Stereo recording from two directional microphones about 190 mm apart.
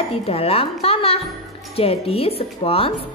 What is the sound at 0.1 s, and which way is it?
Speech, 30° left (ahead or behind).